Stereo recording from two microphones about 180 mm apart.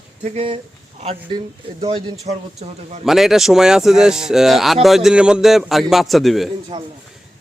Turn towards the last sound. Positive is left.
turn(degrees=0)  # may be behind; listen again after turning